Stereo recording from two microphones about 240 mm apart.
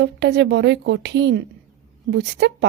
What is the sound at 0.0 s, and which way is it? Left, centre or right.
A woman's voice, right.